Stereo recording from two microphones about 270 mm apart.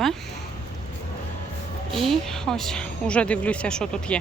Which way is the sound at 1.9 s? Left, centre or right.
Centre.